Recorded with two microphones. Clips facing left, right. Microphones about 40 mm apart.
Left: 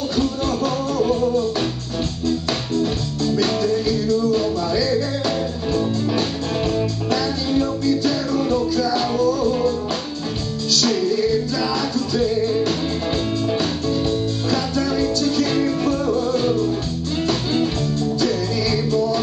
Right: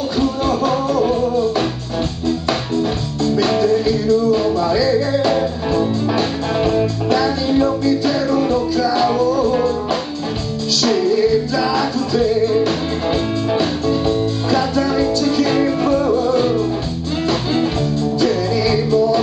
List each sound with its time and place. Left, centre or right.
0.1 s music: centre
2.2 s music: centre
10.8 s music: centre